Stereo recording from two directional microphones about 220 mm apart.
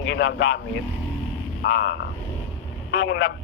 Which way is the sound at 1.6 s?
50° left (ahead or behind).